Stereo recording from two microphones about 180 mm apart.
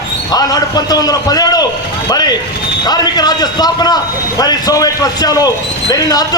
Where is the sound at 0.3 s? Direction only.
20° left (ahead or behind).